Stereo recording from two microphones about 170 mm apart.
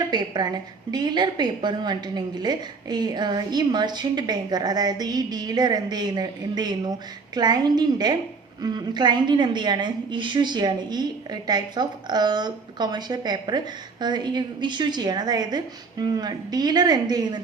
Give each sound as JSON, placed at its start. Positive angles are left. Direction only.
{"t": 0.1, "sound": "a woman's voice", "side_deg": -25}